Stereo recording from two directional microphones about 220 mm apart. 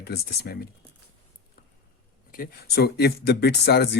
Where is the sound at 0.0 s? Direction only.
45° left (ahead or behind).